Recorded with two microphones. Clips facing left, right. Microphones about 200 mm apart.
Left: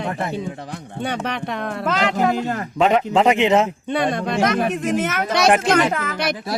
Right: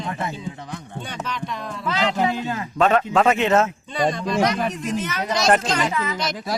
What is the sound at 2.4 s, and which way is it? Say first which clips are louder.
Speech: left 3 dB; 45° left (ahead or behind).